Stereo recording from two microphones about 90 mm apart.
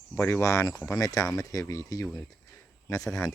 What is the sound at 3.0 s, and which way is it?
Speech, 5° left (ahead or behind).